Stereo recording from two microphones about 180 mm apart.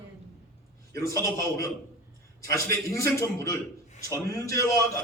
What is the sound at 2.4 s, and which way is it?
A man's voice, 20° left (ahead or behind).